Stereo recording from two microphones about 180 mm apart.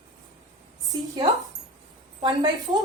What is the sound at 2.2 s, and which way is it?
Speech, 20° right (ahead or behind).